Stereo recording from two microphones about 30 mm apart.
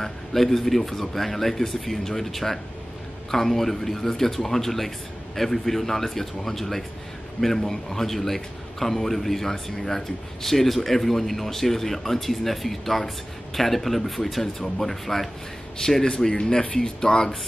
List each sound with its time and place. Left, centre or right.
0.0 s a man's voice: centre